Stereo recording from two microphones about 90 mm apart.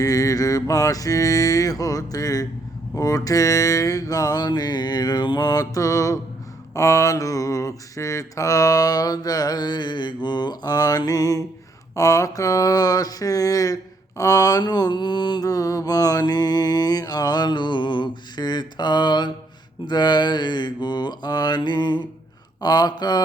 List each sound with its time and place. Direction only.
0.0 s mantra: 40° left (ahead or behind); by 19.3 s 55° left (ahead or behind)
19.9 s a sound: 55° left (ahead or behind)
22.6 s mantra: 50° left (ahead or behind)